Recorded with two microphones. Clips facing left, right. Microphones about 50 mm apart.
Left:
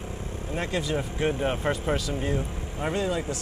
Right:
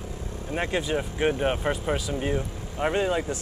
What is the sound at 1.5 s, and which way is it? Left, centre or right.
Speech, centre.